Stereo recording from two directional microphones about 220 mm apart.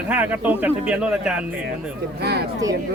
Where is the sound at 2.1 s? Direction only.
45° right (ahead or behind).